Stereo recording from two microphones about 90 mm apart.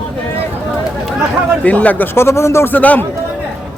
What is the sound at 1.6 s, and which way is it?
Speech, 15° left (ahead or behind).